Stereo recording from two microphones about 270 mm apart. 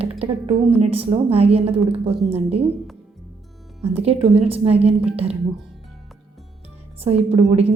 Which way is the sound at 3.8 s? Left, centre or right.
Right.